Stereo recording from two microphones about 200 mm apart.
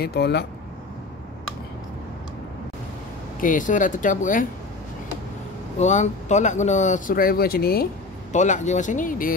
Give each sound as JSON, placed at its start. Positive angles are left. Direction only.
{"t": 0.0, "sound": "speech", "side_deg": 55}
{"t": 3.3, "sound": "speech", "side_deg": 40}
{"t": 5.8, "sound": "speech", "side_deg": 35}